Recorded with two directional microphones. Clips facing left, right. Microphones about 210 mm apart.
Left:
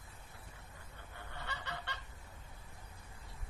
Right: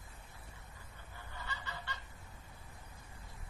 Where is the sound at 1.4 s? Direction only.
65° left (ahead or behind).